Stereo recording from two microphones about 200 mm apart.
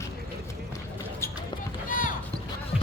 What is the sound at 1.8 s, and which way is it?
Run, 45° left (ahead or behind).